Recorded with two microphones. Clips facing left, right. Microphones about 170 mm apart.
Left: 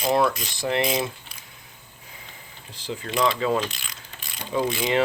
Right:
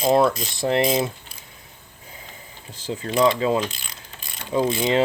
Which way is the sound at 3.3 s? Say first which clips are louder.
Right 3 dB; 25° right (ahead or behind).